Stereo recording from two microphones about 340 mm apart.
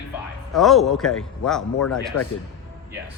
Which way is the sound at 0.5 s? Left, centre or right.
Centre.